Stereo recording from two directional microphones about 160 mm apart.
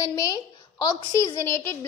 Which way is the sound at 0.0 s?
25° left (ahead or behind).